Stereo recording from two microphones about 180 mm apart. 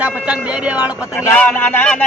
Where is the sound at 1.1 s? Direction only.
10° left (ahead or behind).